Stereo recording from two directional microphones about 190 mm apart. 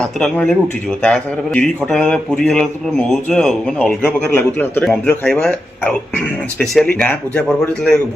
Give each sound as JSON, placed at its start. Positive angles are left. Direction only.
{"t": 0.0, "sound": "a man's voice", "side_deg": 5}